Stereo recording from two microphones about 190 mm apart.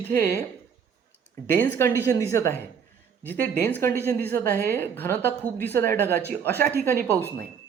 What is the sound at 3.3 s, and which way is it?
Speech, 50° right (ahead or behind).